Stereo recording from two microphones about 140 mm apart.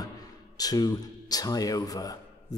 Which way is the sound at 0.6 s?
30° left (ahead or behind).